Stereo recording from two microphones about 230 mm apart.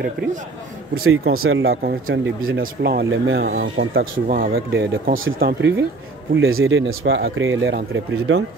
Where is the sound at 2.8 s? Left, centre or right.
Right.